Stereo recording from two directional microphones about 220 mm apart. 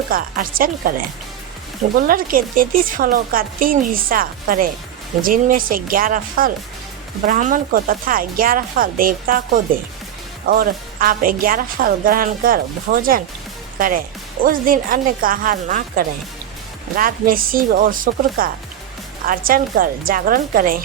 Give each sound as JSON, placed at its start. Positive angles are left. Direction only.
{"t": 0.1, "sound": "speech", "side_deg": -40}
{"t": 2.0, "sound": "speech", "side_deg": -40}
{"t": 10.4, "sound": "speech", "side_deg": -40}